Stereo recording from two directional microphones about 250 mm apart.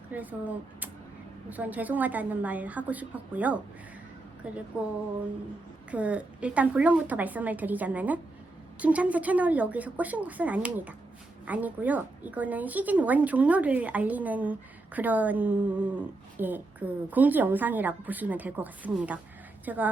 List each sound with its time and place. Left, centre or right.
0.1 s speech: centre
1.5 s a woman's voice: centre
5.9 s a woman's voice: centre